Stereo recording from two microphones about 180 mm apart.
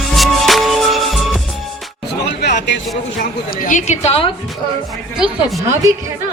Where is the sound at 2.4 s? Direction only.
70° left (ahead or behind).